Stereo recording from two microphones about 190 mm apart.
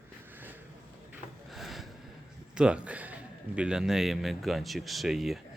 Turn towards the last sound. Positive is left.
turn(degrees=0)  # may be behind; listen again after turning